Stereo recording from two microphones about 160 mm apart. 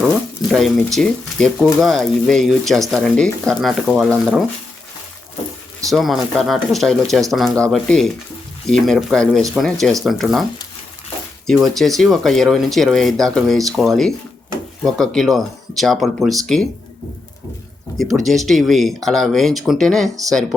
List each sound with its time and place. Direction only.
0.5 s speech: centre (ahead or behind)
5.9 s speech: centre (ahead or behind)
11.4 s speech: centre (ahead or behind)
17.9 s speech: centre (ahead or behind)